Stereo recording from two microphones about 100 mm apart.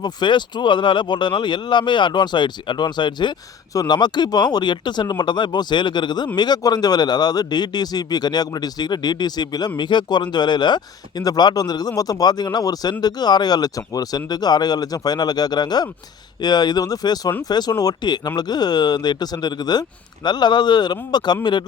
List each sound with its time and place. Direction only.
0.0 s speech: 50° left (ahead or behind)